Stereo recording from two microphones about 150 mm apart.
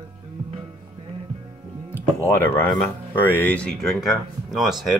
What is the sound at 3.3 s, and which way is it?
Speech, 10° left (ahead or behind).